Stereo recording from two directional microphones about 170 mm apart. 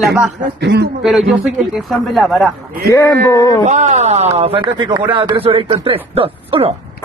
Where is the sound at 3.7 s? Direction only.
45° right (ahead or behind).